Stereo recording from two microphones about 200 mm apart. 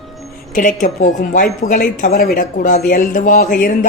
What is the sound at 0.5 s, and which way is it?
Speech, 40° left (ahead or behind).